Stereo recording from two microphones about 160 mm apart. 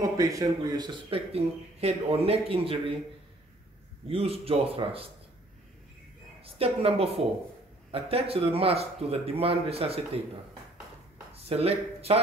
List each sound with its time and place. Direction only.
0.0 s speech: 20° right (ahead or behind); by 3.0 s 35° right (ahead or behind)
4.1 s speech: 35° right (ahead or behind)
6.4 s a woman's voice: 35° right (ahead or behind)
11.4 s speech: 40° right (ahead or behind)